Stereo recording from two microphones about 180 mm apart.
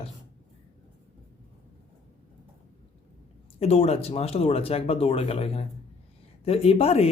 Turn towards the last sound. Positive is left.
turn(degrees=35)  # may be behind; listen again after turning